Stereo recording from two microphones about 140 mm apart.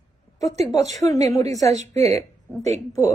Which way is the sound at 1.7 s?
50° right (ahead or behind).